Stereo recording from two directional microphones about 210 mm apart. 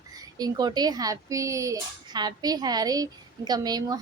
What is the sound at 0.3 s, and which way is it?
A woman's voice, 20° right (ahead or behind).